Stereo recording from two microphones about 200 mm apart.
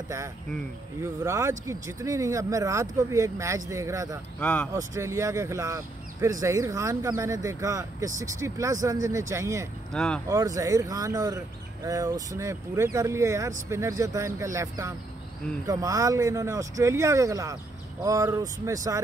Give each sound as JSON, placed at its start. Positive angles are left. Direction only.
{"t": 1.0, "sound": "speech", "side_deg": -15}
{"t": 4.4, "sound": "speech", "side_deg": 5}
{"t": 4.7, "sound": "speech", "side_deg": -15}
{"t": 9.9, "sound": "speech", "side_deg": 5}
{"t": 10.2, "sound": "speech", "side_deg": -15}